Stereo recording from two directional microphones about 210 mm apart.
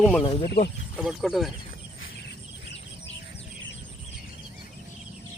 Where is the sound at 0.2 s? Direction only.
25° left (ahead or behind).